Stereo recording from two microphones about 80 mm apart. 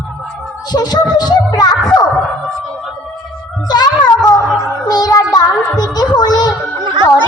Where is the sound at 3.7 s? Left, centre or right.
Left.